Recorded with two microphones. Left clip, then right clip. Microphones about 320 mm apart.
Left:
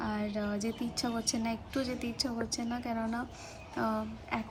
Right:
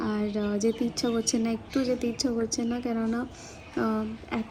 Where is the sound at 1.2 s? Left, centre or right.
Centre.